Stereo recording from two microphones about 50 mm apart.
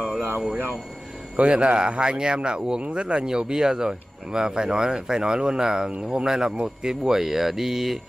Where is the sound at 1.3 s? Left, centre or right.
Right.